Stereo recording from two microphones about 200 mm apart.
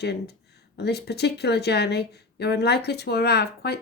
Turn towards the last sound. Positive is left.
turn(degrees=55)  # may be behind; listen again after turning